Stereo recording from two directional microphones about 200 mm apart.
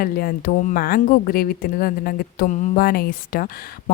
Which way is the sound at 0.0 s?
45° left (ahead or behind).